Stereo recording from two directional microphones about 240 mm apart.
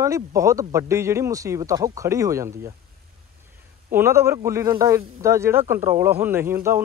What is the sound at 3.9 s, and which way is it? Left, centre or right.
Speech, centre.